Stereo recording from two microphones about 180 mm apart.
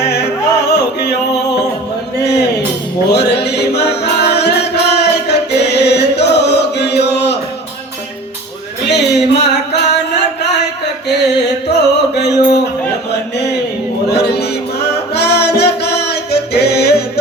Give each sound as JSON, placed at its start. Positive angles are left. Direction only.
{"t": 0.0, "sound": "music", "side_deg": 65}
{"t": 2.1, "sound": "a man's voice", "side_deg": 65}
{"t": 3.1, "sound": "music", "side_deg": 65}
{"t": 8.9, "sound": "a sound", "side_deg": 70}
{"t": 11.1, "sound": "music", "side_deg": 70}
{"t": 13.1, "sound": "a sound", "side_deg": 65}
{"t": 14.1, "sound": "music", "side_deg": 65}